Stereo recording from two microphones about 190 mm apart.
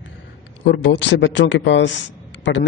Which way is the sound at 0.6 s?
70° left (ahead or behind).